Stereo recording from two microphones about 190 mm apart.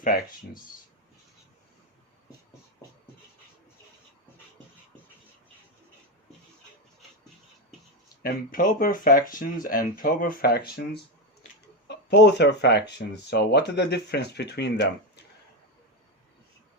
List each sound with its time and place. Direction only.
0.0 s speech: 45° left (ahead or behind)
8.2 s speech: 50° left (ahead or behind)
11.9 s speech: 60° left (ahead or behind)